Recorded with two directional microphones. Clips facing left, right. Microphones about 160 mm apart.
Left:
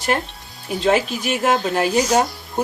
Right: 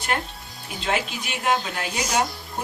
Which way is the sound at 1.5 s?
40° left (ahead or behind).